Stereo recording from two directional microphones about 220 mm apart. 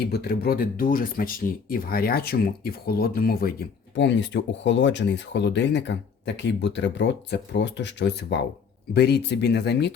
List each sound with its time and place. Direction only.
0.0 s speech: 45° left (ahead or behind)